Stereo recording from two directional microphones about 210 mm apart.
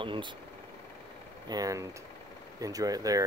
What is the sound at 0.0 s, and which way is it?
Speech, 25° right (ahead or behind).